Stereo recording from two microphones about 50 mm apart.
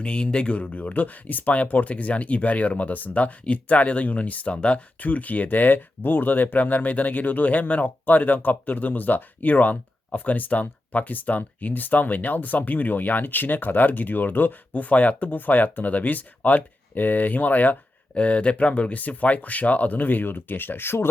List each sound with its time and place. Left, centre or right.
0.0 s speech: centre; by 17.7 s left
18.1 s speech: left